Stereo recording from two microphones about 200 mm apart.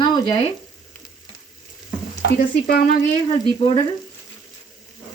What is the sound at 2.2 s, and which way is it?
Stir, 50° left (ahead or behind).